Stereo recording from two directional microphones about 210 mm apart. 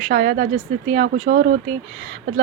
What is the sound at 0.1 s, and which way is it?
Speech, 45° right (ahead or behind).